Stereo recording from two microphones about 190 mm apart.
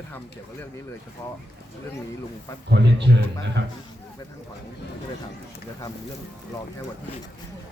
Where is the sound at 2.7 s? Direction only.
65° right (ahead or behind).